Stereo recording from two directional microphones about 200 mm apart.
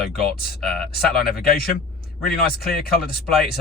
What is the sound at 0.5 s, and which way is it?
Speech, 50° left (ahead or behind).